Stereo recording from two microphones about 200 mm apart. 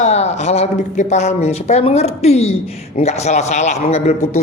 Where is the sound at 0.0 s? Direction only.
30° left (ahead or behind).